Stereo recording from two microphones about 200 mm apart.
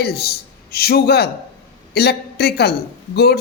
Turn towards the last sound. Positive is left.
turn(degrees=55)  # may be behind; listen again after turning